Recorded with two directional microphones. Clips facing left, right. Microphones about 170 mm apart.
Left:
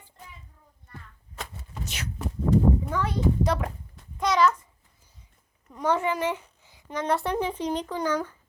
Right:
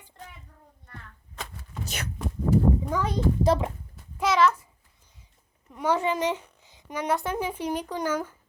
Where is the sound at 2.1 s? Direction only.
Centre (ahead or behind).